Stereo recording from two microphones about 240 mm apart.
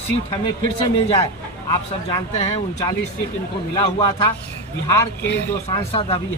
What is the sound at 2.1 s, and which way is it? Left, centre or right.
Speech, centre.